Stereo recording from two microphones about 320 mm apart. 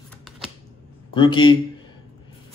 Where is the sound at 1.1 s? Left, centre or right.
Centre.